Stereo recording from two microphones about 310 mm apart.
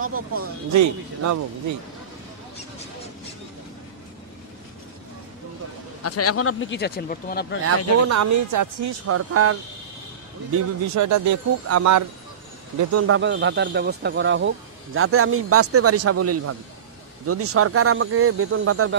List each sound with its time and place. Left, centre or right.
0.0 s speech: right
0.7 s speech: right
6.0 s speech: left
7.6 s speech: right
9.0 s speech: right
11.0 s speech: right
12.9 s speech: right